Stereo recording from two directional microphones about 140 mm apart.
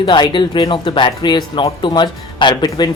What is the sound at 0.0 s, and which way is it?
Speech, 35° left (ahead or behind).